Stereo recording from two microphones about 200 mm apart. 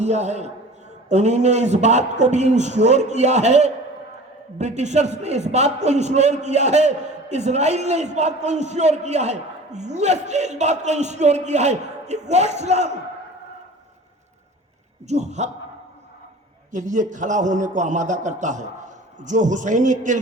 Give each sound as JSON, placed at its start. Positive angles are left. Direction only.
{"t": 0.0, "sound": "a man's voice", "side_deg": -35}
{"t": 15.0, "sound": "a man's voice", "side_deg": -35}
{"t": 16.7, "sound": "a man's voice", "side_deg": -40}